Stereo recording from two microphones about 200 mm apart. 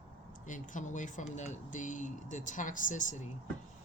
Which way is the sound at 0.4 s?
40° left (ahead or behind).